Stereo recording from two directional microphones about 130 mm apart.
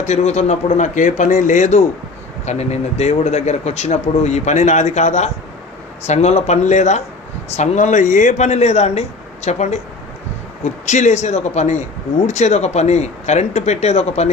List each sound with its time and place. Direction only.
0.0 s a man's voice: 60° left (ahead or behind)